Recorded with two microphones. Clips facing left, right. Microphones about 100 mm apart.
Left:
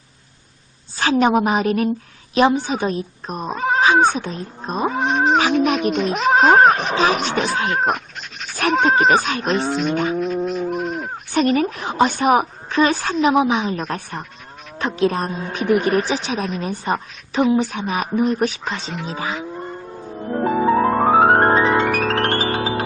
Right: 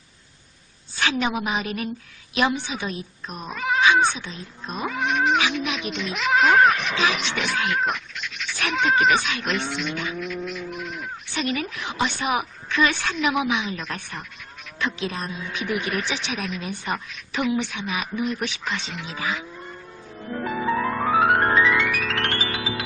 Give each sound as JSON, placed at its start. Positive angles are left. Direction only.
{"t": 0.9, "sound": "a woman's voice", "side_deg": 40}
{"t": 19.5, "sound": "music", "side_deg": 40}